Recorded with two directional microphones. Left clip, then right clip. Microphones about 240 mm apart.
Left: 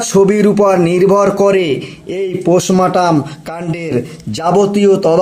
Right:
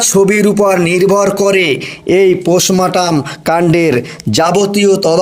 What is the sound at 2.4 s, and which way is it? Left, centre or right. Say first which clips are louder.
Speech: even; centre.